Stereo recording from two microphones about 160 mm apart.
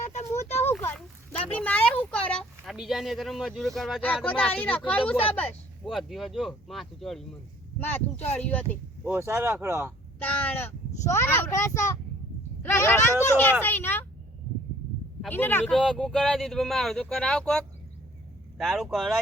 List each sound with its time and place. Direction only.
0.6 s a sound: 15° left (ahead or behind)
1.5 s speech: 10° left (ahead or behind)
8.3 s speech: 10° left (ahead or behind)
9.0 s speech: 15° right (ahead or behind)
10.2 s speech: 10° left (ahead or behind)
15.3 s speech: 10° left (ahead or behind)